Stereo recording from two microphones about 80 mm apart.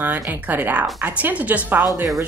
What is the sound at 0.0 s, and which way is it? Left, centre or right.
A woman's voice, right.